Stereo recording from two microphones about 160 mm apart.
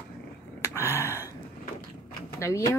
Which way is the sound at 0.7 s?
15° left (ahead or behind).